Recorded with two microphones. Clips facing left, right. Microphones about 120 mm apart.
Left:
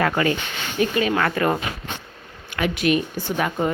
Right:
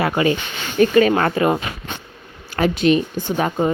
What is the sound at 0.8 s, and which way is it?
Speech, 45° right (ahead or behind).